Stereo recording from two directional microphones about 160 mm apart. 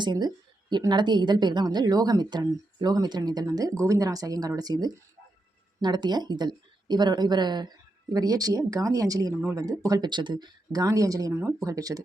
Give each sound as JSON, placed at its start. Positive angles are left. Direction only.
{"t": 0.0, "sound": "speech", "side_deg": -25}